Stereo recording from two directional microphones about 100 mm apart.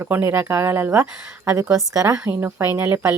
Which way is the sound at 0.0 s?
20° right (ahead or behind).